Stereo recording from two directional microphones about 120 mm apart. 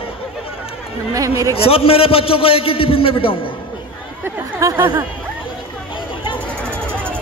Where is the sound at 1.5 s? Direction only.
50° left (ahead or behind).